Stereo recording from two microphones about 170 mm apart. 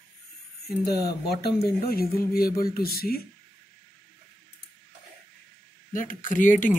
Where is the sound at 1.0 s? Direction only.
70° left (ahead or behind).